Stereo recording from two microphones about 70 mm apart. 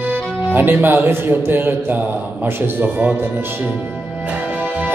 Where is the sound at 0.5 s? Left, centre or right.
Right.